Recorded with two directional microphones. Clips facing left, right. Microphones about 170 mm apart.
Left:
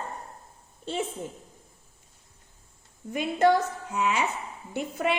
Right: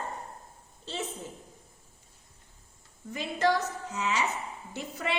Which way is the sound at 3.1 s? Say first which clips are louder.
Left 5 dB; 55° left (ahead or behind).